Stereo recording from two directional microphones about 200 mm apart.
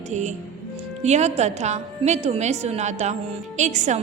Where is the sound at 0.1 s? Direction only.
35° right (ahead or behind).